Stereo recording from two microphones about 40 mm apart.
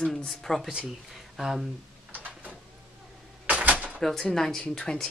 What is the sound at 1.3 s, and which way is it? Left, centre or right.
Speech, centre.